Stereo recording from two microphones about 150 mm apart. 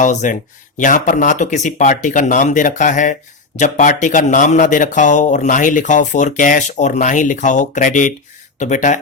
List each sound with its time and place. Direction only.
0.0 s speech: 55° left (ahead or behind)